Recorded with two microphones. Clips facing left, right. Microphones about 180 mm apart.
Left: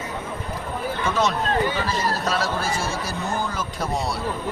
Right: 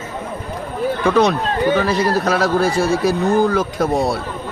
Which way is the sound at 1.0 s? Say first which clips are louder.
Right 8 dB; 65° right (ahead or behind).